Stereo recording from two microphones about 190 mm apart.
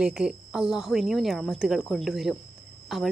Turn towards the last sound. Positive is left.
turn(degrees=0)  # may be behind; listen again after turning